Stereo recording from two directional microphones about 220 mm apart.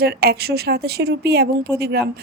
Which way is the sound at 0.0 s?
45° right (ahead or behind).